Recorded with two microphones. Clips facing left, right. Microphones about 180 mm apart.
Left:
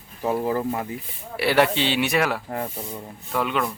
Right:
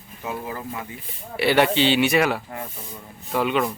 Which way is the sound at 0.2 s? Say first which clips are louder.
Left 8 dB; 45° left (ahead or behind).